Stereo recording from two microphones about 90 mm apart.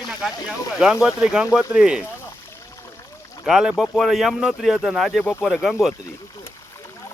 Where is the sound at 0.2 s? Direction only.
10° right (ahead or behind).